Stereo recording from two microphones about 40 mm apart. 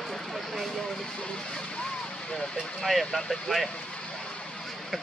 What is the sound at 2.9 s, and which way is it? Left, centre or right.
Speech, centre.